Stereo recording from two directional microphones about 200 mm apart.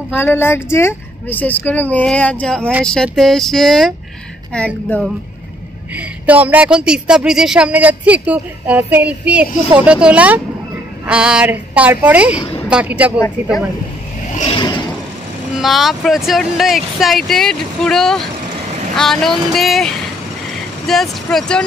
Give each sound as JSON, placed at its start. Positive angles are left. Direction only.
{"t": 0.1, "sound": "a woman's voice", "side_deg": 10}
{"t": 5.9, "sound": "speech", "side_deg": -10}
{"t": 14.6, "sound": "a sound", "side_deg": 20}
{"t": 15.5, "sound": "speech", "side_deg": 0}